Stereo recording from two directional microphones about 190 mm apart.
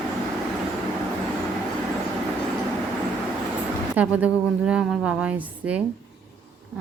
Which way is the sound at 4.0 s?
10° right (ahead or behind).